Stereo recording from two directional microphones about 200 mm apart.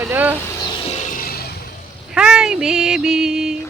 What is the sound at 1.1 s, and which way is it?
Vehicle, 45° left (ahead or behind).